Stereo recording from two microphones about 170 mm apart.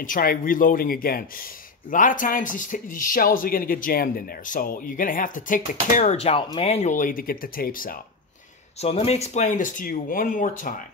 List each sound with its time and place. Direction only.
0.0 s speech: 55° left (ahead or behind)
8.8 s speech: 35° left (ahead or behind)